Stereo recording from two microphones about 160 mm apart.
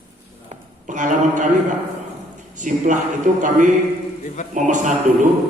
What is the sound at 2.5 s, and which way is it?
Speech, 50° right (ahead or behind).